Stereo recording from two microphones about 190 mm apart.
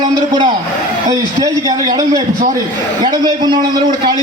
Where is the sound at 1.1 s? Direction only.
20° right (ahead or behind).